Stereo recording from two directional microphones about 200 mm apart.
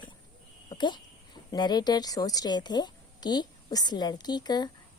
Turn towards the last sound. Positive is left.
turn(degrees=20)  # may be behind; listen again after turning